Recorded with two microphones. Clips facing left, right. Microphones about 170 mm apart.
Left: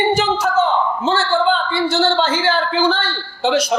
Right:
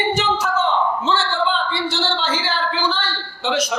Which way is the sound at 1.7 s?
45° left (ahead or behind).